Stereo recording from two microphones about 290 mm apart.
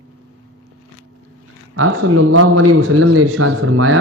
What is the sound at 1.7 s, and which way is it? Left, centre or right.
A man's voice, right.